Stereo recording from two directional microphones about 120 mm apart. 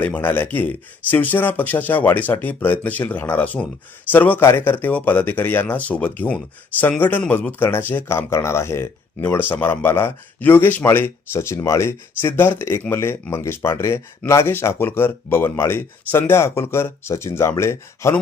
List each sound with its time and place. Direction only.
0.0 s speech: 15° left (ahead or behind)